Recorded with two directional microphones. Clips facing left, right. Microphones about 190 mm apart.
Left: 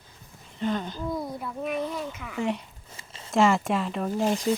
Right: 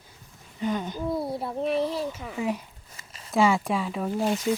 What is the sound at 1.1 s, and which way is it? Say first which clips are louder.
Speech: right 5 dB; 30° right (ahead or behind).